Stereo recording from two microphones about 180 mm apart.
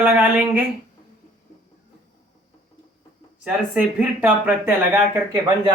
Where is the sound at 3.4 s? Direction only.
10° right (ahead or behind).